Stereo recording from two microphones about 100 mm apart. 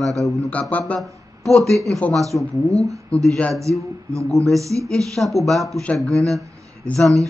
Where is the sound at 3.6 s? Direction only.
30° right (ahead or behind).